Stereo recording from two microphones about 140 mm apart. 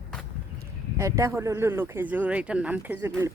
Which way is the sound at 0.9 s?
20° right (ahead or behind).